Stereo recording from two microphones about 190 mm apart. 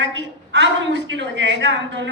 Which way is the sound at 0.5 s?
70° right (ahead or behind).